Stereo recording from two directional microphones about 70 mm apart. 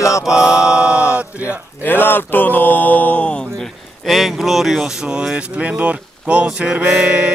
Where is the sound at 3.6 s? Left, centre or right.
Centre.